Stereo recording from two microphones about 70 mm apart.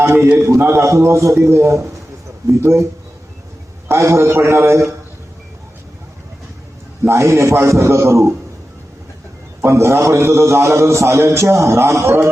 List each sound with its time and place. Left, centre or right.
0.0 s a man's voice: right
3.8 s a man's voice: right
7.1 s a man's voice: right
9.6 s a man's voice: right